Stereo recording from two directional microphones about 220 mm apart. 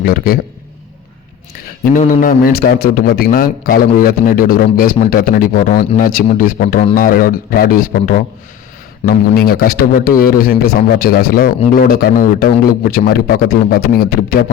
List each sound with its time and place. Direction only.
0.0 s a man's voice: 40° left (ahead or behind)
1.8 s a man's voice: 40° left (ahead or behind)